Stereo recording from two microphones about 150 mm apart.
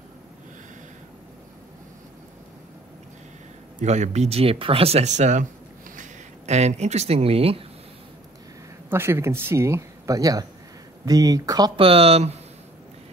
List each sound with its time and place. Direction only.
3.8 s speech: 50° right (ahead or behind)
8.9 s speech: 15° right (ahead or behind)
11.8 s speech: 40° right (ahead or behind)